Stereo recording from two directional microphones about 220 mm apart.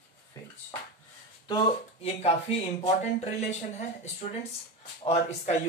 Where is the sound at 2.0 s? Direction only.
25° left (ahead or behind).